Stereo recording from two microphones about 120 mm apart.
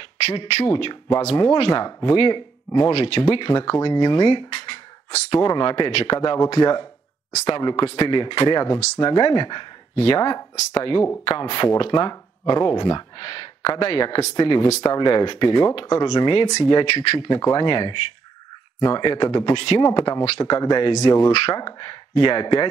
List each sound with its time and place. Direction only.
0.2 s speech: 50° left (ahead or behind)
1.2 s speech: 35° left (ahead or behind)
16.8 s speech: 50° left (ahead or behind)
17.3 s speech: 30° left (ahead or behind)
21.3 s speech: 55° left (ahead or behind)
21.5 s speech: 35° left (ahead or behind)